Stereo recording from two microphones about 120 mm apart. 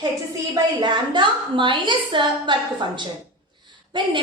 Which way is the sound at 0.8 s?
40° right (ahead or behind).